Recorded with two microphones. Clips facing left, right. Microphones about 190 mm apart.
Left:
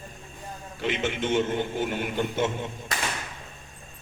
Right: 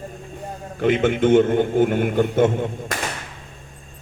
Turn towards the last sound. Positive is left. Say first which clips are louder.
# right 8 dB
turn(degrees=-50)  # may be behind; listen again after turning